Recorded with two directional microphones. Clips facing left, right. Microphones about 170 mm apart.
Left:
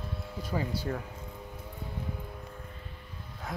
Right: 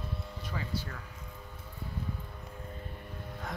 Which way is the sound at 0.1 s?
5° left (ahead or behind).